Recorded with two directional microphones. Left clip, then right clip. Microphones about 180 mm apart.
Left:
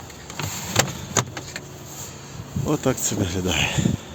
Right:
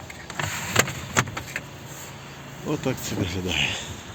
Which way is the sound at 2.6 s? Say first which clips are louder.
Left 5 dB; 30° left (ahead or behind).